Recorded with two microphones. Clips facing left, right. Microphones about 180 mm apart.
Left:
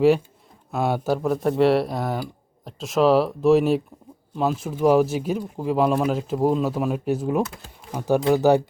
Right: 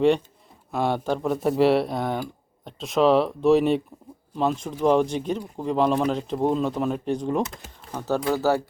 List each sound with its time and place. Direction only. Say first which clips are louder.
0.7 s speech: left 1 dB; 5° left (ahead or behind)